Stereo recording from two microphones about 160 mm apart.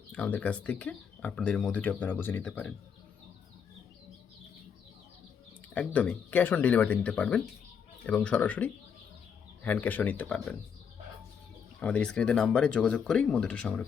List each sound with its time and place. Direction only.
0.1 s speech: 10° left (ahead or behind)
5.7 s speech: 10° left (ahead or behind)
11.8 s speech: 5° left (ahead or behind)